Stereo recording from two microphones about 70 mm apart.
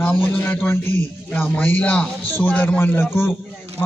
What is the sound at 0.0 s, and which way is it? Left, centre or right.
A man's voice, left.